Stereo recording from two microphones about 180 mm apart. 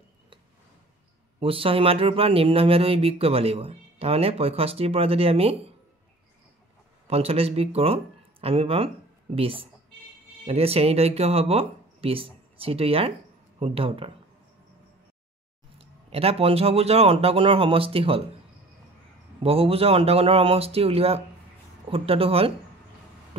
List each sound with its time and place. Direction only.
1.4 s speech: 30° right (ahead or behind)
7.1 s speech: 35° right (ahead or behind)
15.8 s speech: 35° right (ahead or behind)
19.4 s speech: 30° right (ahead or behind)